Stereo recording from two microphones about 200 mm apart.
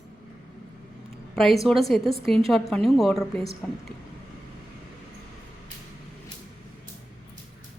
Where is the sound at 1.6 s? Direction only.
Centre (ahead or behind).